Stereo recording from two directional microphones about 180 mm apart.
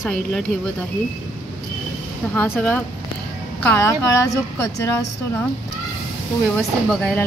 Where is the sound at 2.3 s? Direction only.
10° left (ahead or behind).